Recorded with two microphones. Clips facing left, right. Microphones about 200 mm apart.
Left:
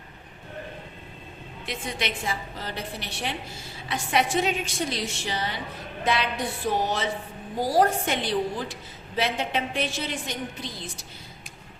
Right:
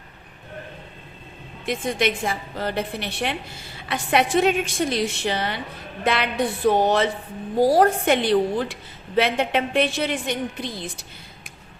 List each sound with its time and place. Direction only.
1.6 s a woman's voice: 50° right (ahead or behind)
6.7 s a woman's voice: 60° right (ahead or behind)